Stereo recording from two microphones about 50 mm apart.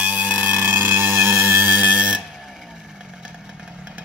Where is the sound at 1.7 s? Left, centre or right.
Right.